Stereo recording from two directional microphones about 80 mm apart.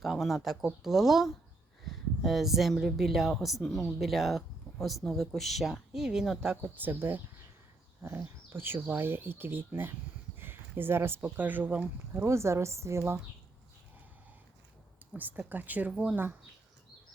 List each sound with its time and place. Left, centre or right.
0.0 s speech: centre
6.6 s speech: right
8.4 s speech: right
10.3 s a sound: right
11.2 s speech: right
12.2 s a woman's voice: right
15.1 s speech: right
15.9 s speech: centre